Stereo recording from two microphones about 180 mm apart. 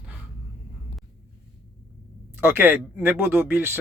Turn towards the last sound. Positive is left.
turn(degrees=-10)  # may be behind; listen again after turning